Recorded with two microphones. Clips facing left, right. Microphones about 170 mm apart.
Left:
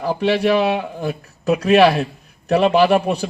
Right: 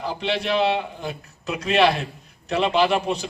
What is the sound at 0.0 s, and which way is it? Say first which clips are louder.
A man's voice: left 8 dB; 55° left (ahead or behind).